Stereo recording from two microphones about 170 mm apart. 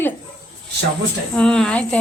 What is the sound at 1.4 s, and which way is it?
Speech, 5° left (ahead or behind).